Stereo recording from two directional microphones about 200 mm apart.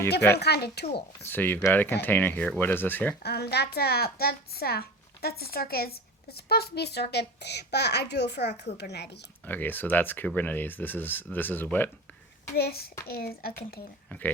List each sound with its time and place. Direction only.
0.3 s speech: 55° left (ahead or behind)
1.2 s speech: 10° left (ahead or behind)
3.2 s a woman's voice: 55° left (ahead or behind)
9.5 s speech: 10° left (ahead or behind)
12.5 s a woman's voice: 50° left (ahead or behind)
14.1 s speech: 10° left (ahead or behind)